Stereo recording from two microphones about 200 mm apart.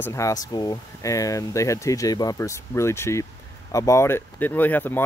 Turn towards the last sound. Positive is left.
turn(degrees=10)  # may be behind; listen again after turning